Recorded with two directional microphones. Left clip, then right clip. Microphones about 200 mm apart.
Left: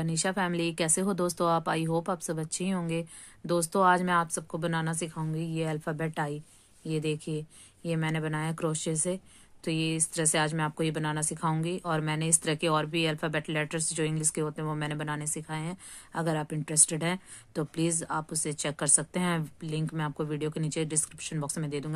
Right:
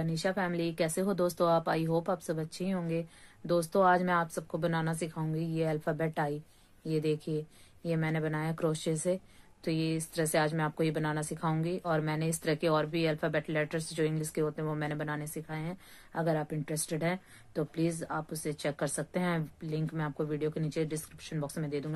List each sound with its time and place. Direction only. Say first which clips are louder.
0.0 s speech: left 2 dB; 35° left (ahead or behind)